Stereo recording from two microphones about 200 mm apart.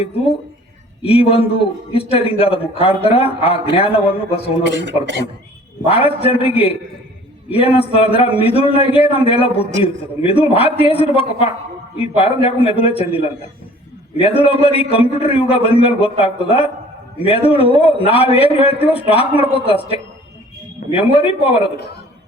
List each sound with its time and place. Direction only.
1.0 s a man's voice: 30° left (ahead or behind)
4.6 s a man's voice: 65° right (ahead or behind)
5.8 s a man's voice: 30° left (ahead or behind)